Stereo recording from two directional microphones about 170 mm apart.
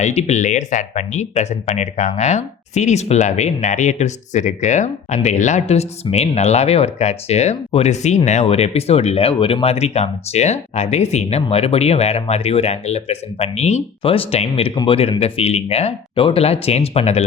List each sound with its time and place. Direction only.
0.0 s speech: 40° left (ahead or behind)